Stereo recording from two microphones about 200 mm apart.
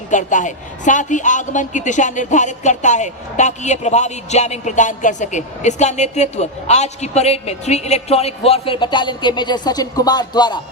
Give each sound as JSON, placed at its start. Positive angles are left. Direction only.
{"t": 0.1, "sound": "a woman's voice", "side_deg": 40}